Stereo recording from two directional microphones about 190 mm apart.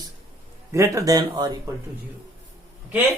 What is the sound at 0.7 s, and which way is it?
Speech, 15° right (ahead or behind).